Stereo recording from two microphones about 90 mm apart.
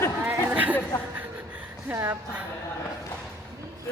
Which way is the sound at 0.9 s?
35° left (ahead or behind).